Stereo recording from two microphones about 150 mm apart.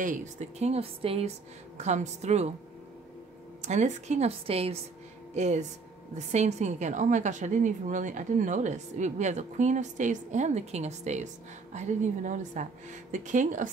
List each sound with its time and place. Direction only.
0.0 s a woman's voice: 55° right (ahead or behind)
3.6 s a woman's voice: 50° right (ahead or behind)